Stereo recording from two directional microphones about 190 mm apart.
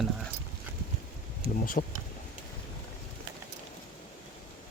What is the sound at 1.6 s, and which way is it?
Speech, 45° left (ahead or behind).